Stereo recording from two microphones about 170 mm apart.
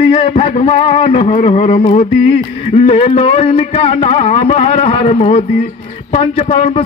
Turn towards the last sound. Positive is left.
turn(degrees=35)  # may be behind; listen again after turning